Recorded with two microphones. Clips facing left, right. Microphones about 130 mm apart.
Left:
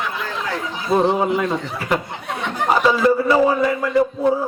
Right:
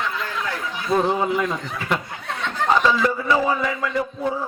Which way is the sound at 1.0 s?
Centre (ahead or behind).